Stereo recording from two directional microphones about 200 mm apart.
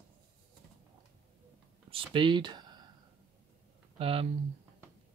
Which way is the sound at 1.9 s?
25° right (ahead or behind).